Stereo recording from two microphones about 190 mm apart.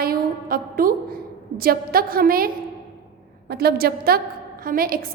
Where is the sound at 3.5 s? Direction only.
55° right (ahead or behind).